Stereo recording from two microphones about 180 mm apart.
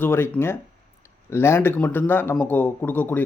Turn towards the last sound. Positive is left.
turn(degrees=10)  # may be behind; listen again after turning